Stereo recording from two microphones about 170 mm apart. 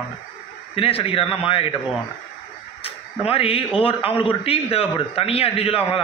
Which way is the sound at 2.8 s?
35° left (ahead or behind).